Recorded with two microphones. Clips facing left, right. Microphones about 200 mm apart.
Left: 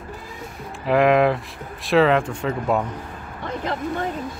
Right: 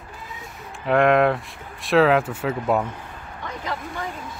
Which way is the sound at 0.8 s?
Centre (ahead or behind).